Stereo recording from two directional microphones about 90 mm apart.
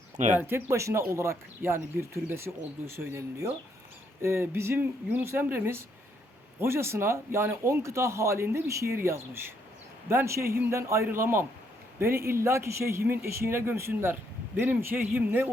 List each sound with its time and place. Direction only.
0.3 s speech: 25° right (ahead or behind)